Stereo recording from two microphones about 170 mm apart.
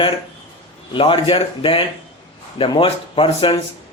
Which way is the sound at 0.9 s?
30° left (ahead or behind).